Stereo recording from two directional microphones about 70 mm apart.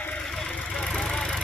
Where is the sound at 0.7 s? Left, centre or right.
Centre.